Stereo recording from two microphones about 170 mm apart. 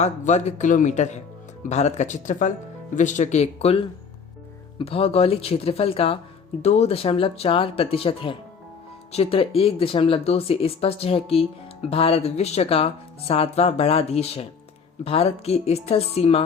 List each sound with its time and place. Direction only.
0.0 s speech: 40° left (ahead or behind)